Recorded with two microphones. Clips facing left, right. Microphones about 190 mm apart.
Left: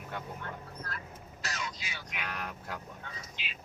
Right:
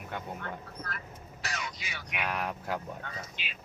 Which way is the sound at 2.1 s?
65° right (ahead or behind).